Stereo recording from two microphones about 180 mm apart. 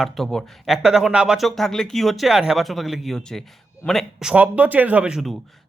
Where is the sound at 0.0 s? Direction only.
Centre (ahead or behind).